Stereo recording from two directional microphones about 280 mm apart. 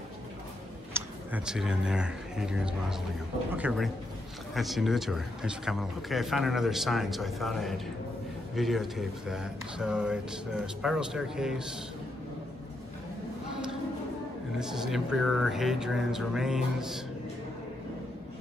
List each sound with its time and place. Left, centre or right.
0.9 s speech: centre
14.6 s speech: centre